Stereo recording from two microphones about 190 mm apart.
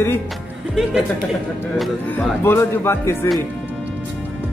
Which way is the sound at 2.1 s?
15° left (ahead or behind).